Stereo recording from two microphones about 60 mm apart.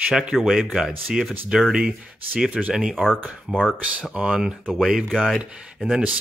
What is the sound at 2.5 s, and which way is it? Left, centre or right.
Speech, centre.